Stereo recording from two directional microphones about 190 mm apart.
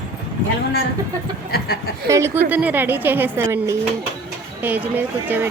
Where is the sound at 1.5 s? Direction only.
55° left (ahead or behind).